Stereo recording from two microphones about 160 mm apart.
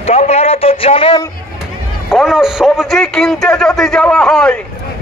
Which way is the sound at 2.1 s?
Centre (ahead or behind).